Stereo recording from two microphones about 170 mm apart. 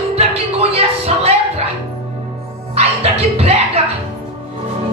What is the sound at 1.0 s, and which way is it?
Music, 35° right (ahead or behind).